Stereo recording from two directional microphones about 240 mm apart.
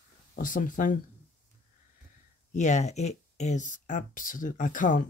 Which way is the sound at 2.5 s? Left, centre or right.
Left.